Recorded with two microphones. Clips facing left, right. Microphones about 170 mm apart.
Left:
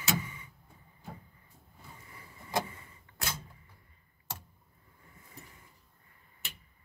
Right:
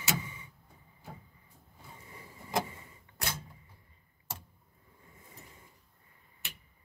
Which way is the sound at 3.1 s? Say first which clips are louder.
Even; 20° right (ahead or behind).